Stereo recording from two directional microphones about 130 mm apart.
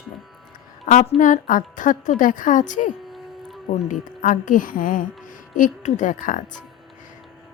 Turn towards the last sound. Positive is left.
turn(degrees=85)